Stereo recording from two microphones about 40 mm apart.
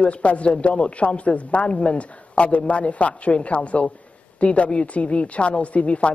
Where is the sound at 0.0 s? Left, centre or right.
Left.